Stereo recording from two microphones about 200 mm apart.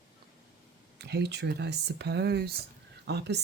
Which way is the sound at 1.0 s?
55° right (ahead or behind).